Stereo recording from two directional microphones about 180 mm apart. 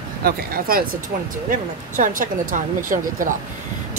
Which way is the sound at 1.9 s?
45° right (ahead or behind).